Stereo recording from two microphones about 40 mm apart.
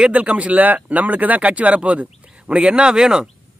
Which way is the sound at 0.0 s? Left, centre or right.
Right.